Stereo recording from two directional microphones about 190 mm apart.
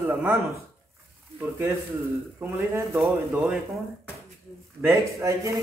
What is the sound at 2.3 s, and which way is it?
Speech, 10° right (ahead or behind).